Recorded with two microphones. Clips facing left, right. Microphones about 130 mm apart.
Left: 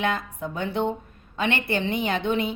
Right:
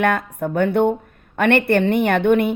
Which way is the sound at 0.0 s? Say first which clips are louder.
Right 7 dB; 60° right (ahead or behind).